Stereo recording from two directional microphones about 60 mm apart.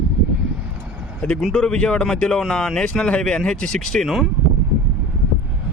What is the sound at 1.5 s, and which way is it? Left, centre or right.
Speech, centre.